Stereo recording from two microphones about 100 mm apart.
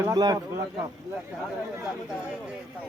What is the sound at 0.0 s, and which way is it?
Speech, 40° right (ahead or behind).